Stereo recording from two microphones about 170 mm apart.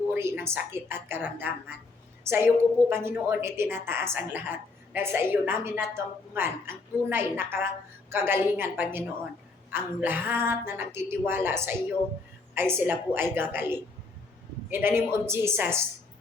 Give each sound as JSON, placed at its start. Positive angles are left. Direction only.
{"t": 0.1, "sound": "a woman's voice", "side_deg": -15}